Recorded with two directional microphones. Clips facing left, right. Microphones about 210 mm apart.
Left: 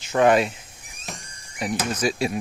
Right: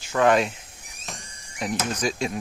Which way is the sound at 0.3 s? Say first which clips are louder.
Right 1 dB; centre (ahead or behind).